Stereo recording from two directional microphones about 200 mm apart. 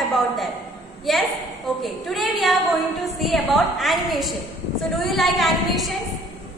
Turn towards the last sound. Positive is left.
turn(degrees=0)  # may be behind; listen again after turning